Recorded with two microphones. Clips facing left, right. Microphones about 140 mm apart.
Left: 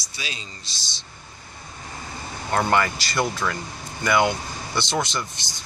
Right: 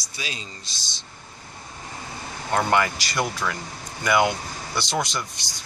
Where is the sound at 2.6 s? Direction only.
10° right (ahead or behind).